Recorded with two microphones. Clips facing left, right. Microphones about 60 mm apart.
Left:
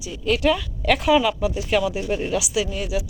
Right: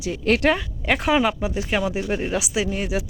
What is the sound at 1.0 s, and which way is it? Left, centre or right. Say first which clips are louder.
Speech: left 1 dB; right.